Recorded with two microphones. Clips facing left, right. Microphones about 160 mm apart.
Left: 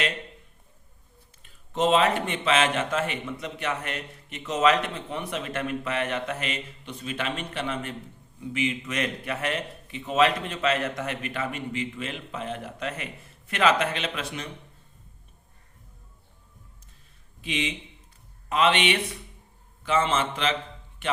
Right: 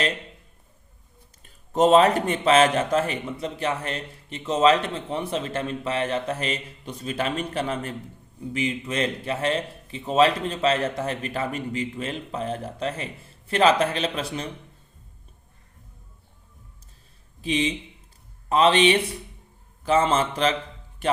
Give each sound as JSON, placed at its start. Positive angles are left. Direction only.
{"t": 1.4, "sound": "a man's voice", "side_deg": -40}
{"t": 17.4, "sound": "a man's voice", "side_deg": -35}